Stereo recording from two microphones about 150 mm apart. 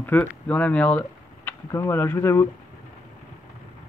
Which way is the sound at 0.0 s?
10° left (ahead or behind).